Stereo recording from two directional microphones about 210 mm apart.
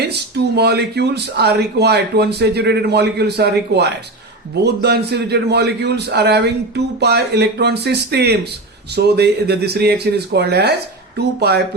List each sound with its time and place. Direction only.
0.1 s speech: 50° right (ahead or behind)